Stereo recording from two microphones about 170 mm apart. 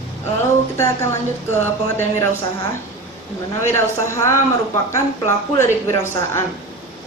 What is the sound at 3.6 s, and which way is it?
Speech, 15° left (ahead or behind).